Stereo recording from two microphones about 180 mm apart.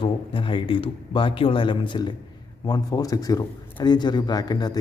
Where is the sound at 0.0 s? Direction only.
30° left (ahead or behind).